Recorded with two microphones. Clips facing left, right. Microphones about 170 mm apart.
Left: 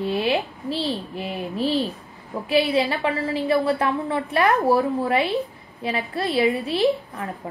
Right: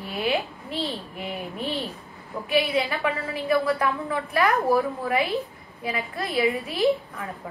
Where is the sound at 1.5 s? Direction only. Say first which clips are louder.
Left 11 dB; 30° left (ahead or behind).